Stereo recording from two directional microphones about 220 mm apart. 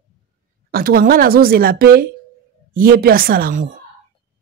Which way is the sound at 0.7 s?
40° right (ahead or behind).